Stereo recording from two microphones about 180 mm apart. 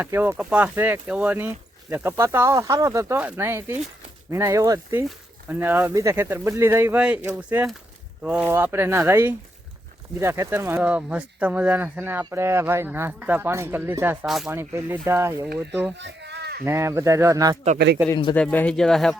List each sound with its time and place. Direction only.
0.0 s speech: 10° right (ahead or behind)
14.3 s speech: centre (ahead or behind)
14.5 s speech: 15° right (ahead or behind)
16.0 s a sound: 75° right (ahead or behind)
16.6 s speech: 15° right (ahead or behind)
18.3 s speech: 5° left (ahead or behind)